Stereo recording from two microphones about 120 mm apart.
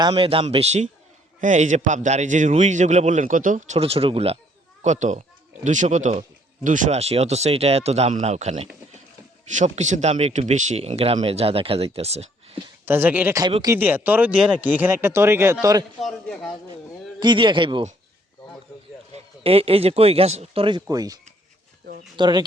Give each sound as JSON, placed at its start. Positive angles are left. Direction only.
{"t": 0.1, "sound": "a man's voice", "side_deg": -50}
{"t": 0.4, "sound": "a man's voice", "side_deg": -65}
{"t": 1.4, "sound": "a man's voice", "side_deg": -90}
{"t": 3.8, "sound": "speech", "side_deg": -55}
{"t": 4.8, "sound": "a man's voice", "side_deg": -85}
{"t": 9.5, "sound": "speech", "side_deg": -80}
{"t": 12.8, "sound": "speech", "side_deg": -15}
{"t": 16.0, "sound": "a man's voice", "side_deg": 0}
{"t": 17.2, "sound": "a man's voice", "side_deg": -40}
{"t": 19.1, "sound": "a man's voice", "side_deg": -55}
{"t": 20.8, "sound": "speech", "side_deg": -30}